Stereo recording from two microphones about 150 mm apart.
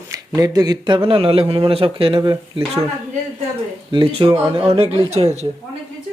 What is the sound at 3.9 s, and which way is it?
A man's voice, 30° right (ahead or behind).